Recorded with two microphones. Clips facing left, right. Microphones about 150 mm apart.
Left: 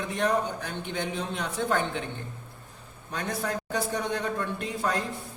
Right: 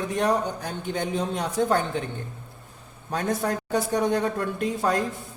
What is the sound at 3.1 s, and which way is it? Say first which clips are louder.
A man's voice: right 5 dB; 40° right (ahead or behind).